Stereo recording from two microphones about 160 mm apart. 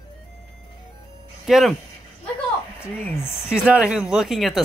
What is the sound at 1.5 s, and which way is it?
Speech, centre (ahead or behind).